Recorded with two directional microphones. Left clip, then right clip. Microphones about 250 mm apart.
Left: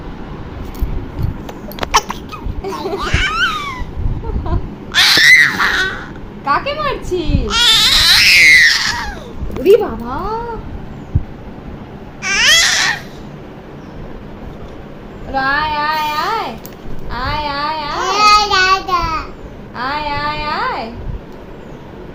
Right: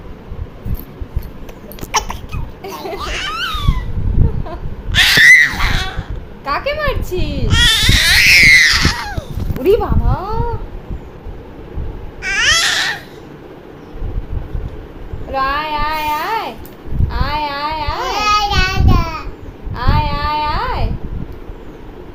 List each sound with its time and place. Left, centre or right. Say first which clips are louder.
1.9 s dog: left 3 dB; centre
2.7 s a sound: left 4 dB; centre
4.9 s screaming: right 1 dB; centre
6.4 s a child's voice: left 2 dB; right
7.4 s baby cry: left 2 dB; centre
9.6 s a woman's voice: left 3 dB; right
12.2 s baby cry: left 2 dB; centre
15.3 s child singing: left 2 dB; centre
18.0 s child singing: left 5 dB; centre